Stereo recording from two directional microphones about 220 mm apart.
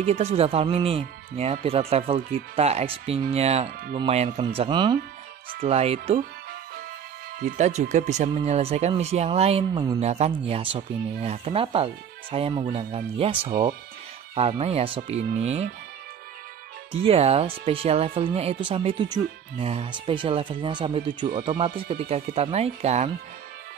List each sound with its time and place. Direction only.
0.0 s speech: 25° right (ahead or behind)
7.3 s speech: 35° right (ahead or behind)
13.5 s speech: 40° right (ahead or behind)
14.3 s speech: 30° right (ahead or behind)
16.9 s speech: 25° right (ahead or behind)